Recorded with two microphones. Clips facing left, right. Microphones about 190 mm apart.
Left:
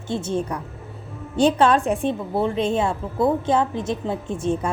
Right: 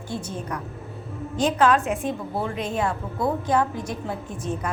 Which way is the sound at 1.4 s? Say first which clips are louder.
Left 3 dB; 30° left (ahead or behind).